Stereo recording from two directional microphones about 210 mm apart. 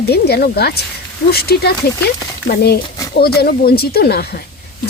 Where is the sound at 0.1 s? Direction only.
50° left (ahead or behind).